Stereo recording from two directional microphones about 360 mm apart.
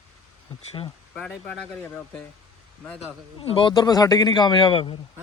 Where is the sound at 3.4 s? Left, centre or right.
Centre.